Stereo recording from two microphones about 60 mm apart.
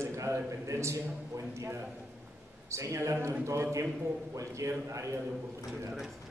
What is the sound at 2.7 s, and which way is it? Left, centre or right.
Speech, right.